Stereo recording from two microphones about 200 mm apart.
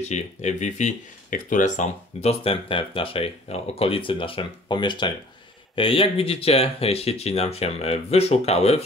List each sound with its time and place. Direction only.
0.0 s speech: 35° left (ahead or behind)